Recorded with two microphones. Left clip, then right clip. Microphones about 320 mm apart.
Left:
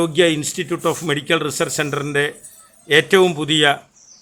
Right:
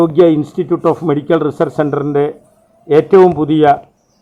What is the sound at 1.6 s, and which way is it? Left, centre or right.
Speech, left.